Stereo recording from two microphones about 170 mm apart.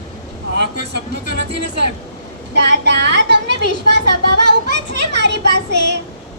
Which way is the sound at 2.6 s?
90° right.